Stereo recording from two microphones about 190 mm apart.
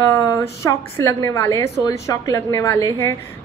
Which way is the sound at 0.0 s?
15° left (ahead or behind).